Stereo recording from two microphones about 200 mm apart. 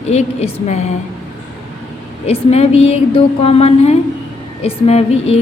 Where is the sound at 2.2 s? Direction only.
30° left (ahead or behind).